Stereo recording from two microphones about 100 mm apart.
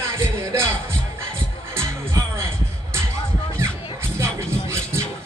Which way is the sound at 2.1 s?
25° right (ahead or behind).